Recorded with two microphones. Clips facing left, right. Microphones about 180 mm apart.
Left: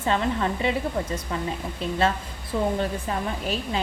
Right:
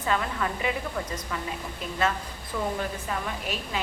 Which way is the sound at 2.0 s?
30° left (ahead or behind).